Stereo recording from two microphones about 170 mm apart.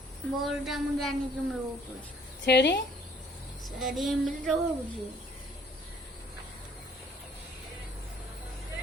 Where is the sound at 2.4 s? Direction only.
90° left.